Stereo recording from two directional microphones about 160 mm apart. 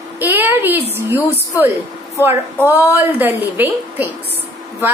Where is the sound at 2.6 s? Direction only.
10° right (ahead or behind).